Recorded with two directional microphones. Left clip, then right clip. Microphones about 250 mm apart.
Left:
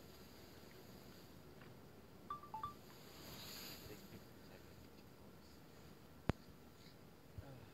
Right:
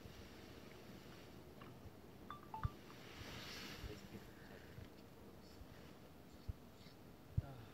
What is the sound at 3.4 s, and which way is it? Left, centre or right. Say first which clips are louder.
Boat: even; left.